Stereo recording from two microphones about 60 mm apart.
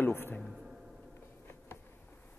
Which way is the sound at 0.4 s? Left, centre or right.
Centre.